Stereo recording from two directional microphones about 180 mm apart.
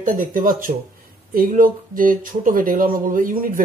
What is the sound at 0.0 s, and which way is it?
A woman's voice, 50° right (ahead or behind).